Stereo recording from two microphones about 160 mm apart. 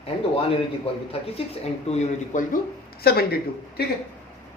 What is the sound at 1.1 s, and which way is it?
Speech, 40° left (ahead or behind).